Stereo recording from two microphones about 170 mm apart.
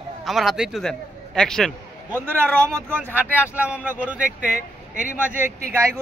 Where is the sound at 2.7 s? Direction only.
15° right (ahead or behind).